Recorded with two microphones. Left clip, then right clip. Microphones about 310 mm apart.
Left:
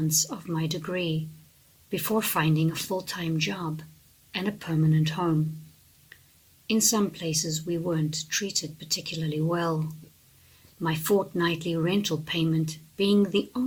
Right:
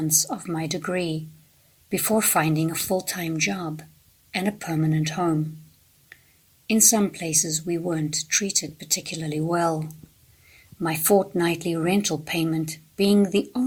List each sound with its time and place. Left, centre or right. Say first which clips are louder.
0.1 s speech: right 3 dB; centre
6.7 s speech: right 4 dB; centre
10.8 s speech: right 5 dB; centre